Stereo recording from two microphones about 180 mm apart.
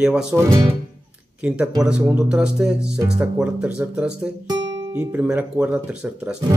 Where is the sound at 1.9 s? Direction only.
10° right (ahead or behind).